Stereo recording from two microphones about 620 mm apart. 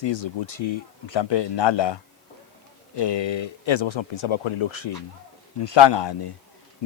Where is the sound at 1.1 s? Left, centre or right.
Left.